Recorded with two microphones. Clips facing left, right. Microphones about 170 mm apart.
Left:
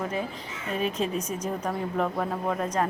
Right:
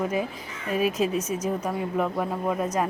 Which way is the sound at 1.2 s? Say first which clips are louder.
Right 3 dB; 35° left (ahead or behind).